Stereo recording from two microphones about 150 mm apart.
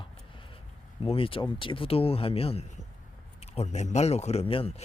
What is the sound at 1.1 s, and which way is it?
A man's voice, 35° left (ahead or behind).